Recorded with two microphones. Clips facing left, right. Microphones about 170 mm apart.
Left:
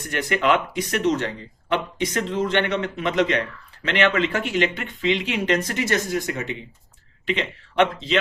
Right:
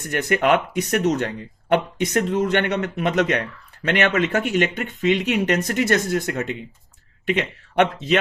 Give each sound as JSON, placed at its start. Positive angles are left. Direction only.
{"t": 0.0, "sound": "a man's voice", "side_deg": -45}
{"t": 7.8, "sound": "a man's voice", "side_deg": -50}